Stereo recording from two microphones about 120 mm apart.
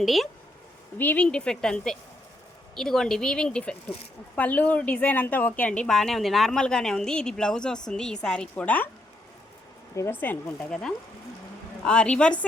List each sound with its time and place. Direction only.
0.0 s a woman's voice: centre (ahead or behind)
0.9 s a woman's voice: 15° left (ahead or behind)
9.9 s a woman's voice: 20° left (ahead or behind)